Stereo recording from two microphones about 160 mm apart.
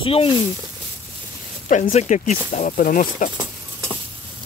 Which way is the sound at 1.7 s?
50° left (ahead or behind).